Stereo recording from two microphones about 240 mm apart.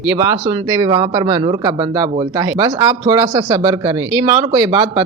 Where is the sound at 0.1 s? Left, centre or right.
Centre.